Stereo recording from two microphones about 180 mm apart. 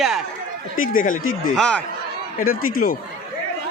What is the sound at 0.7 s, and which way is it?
Speech, 50° left (ahead or behind).